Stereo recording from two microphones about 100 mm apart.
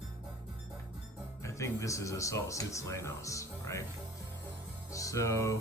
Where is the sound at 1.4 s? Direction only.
30° left (ahead or behind).